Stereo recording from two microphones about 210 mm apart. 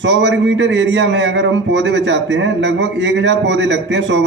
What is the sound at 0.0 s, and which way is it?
Speech, 60° right (ahead or behind).